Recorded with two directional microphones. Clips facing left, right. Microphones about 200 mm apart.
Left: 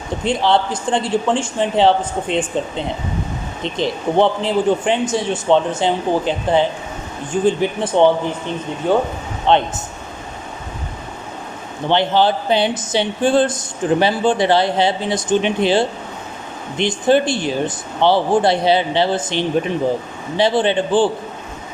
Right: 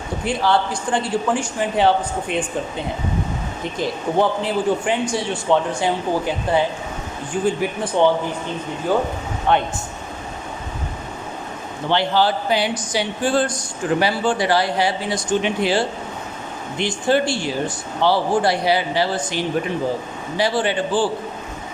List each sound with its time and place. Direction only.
0.3 s speech: 25° left (ahead or behind)
11.9 s speech: 20° left (ahead or behind)